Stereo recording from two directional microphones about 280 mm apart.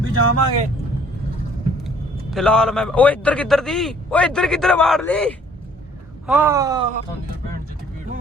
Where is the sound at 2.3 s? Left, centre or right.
Centre.